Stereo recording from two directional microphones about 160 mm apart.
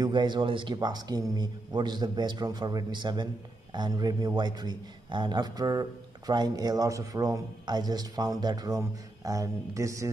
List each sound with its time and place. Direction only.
0.0 s a man's voice: 30° right (ahead or behind)